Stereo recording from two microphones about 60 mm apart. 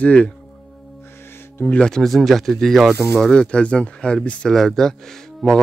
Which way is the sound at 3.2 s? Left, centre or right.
Centre.